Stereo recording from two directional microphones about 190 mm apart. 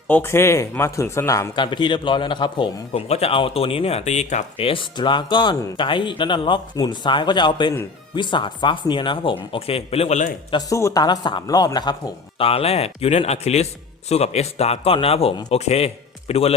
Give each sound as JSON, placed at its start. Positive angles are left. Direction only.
{"t": 0.1, "sound": "speech", "side_deg": 10}
{"t": 1.5, "sound": "a man's voice", "side_deg": 25}
{"t": 10.5, "sound": "a man's voice", "side_deg": 15}